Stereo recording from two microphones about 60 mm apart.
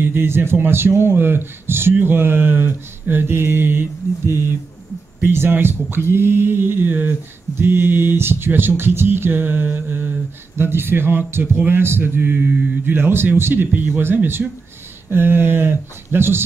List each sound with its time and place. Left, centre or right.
0.0 s speech: right